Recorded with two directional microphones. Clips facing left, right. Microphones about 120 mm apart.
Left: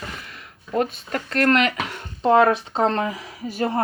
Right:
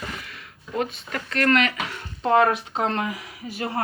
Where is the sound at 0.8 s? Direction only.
40° left (ahead or behind).